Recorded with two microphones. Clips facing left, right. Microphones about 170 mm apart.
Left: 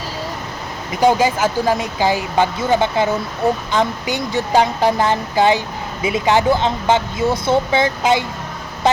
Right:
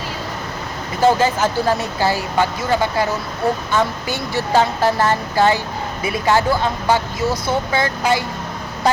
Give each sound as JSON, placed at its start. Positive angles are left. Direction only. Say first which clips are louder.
{"t": 1.0, "sound": "speech", "louder": "left 1 dB", "side_deg": 15}